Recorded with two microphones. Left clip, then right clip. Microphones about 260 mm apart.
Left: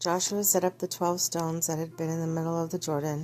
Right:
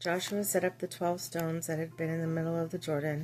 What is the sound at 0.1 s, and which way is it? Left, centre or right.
A woman's voice, centre.